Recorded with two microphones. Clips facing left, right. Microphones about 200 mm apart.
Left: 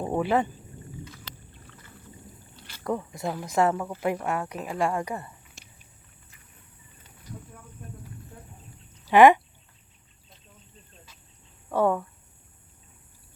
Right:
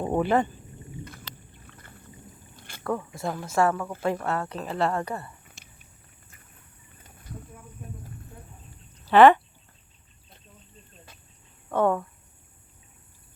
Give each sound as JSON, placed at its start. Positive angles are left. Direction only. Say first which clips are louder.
{"t": 0.0, "sound": "speech", "louder": "right 1 dB", "side_deg": 0}
{"t": 2.6, "sound": "rowboat", "louder": "right 2 dB", "side_deg": -50}
{"t": 2.8, "sound": "a woman's voice", "louder": "even", "side_deg": 20}
{"t": 9.0, "sound": "speech", "louder": "even", "side_deg": 10}
{"t": 11.7, "sound": "a woman's voice", "louder": "even", "side_deg": 5}